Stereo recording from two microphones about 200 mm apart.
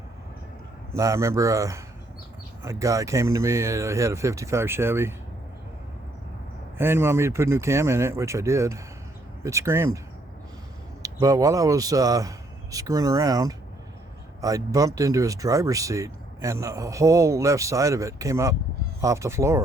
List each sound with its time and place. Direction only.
0.9 s speech: 15° right (ahead or behind)
6.7 s speech: 10° right (ahead or behind)
11.0 s speech: 15° right (ahead or behind)